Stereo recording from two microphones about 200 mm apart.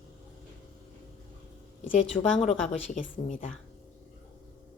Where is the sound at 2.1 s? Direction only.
35° left (ahead or behind).